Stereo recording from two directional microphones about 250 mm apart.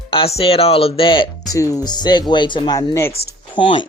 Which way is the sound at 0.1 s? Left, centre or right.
Left.